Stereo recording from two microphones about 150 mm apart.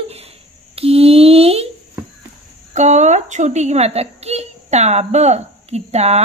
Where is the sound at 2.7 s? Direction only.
50° right (ahead or behind).